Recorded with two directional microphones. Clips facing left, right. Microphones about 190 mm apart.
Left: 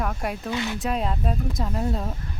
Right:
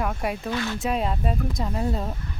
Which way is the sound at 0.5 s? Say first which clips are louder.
Even; 15° left (ahead or behind).